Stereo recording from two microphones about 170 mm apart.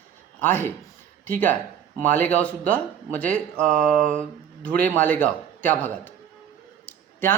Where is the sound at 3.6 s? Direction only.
5° left (ahead or behind).